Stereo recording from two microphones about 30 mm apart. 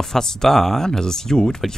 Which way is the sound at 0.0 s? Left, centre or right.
Centre.